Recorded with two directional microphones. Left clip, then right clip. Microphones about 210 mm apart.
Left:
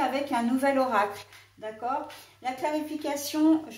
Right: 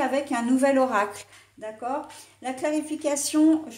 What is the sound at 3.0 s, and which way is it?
Speech, 45° right (ahead or behind).